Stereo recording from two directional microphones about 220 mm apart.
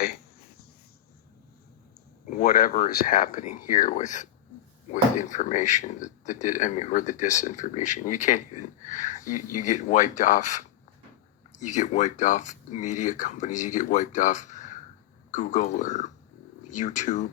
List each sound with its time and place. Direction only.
2.3 s speech: 45° left (ahead or behind)